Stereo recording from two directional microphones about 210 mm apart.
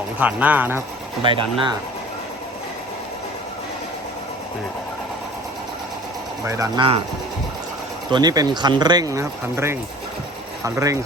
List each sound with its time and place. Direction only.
0.2 s speech: 5° right (ahead or behind)
1.2 s speech: 25° right (ahead or behind)
6.4 s speech: 15° right (ahead or behind)
8.1 s speech: 20° right (ahead or behind)